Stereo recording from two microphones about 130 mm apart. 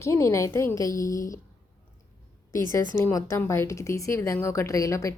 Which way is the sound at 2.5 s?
25° left (ahead or behind).